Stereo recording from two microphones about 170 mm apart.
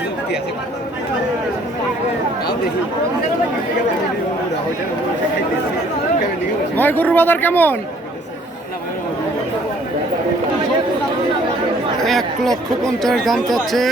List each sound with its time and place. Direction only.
6.7 s speech: 10° left (ahead or behind)
11.9 s speech: centre (ahead or behind)